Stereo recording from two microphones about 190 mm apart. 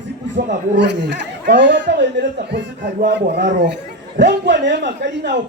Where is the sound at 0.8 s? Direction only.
65° right (ahead or behind).